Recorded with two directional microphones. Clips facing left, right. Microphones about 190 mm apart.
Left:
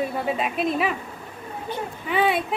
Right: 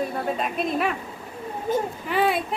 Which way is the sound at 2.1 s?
Centre (ahead or behind).